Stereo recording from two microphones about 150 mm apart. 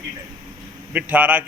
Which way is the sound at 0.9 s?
10° right (ahead or behind).